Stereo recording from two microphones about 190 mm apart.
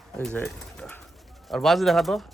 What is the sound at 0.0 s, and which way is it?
Speech, 5° left (ahead or behind).